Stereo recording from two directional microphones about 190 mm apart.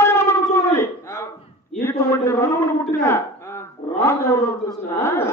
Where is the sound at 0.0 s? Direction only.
15° left (ahead or behind).